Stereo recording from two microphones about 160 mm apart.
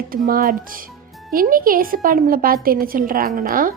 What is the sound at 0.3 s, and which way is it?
A woman's voice, 60° right (ahead or behind).